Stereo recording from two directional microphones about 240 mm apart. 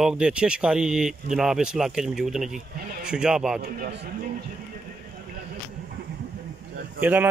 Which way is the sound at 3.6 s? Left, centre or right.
Right.